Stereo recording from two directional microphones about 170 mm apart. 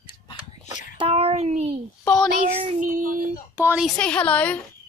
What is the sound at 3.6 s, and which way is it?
Speech, 10° right (ahead or behind).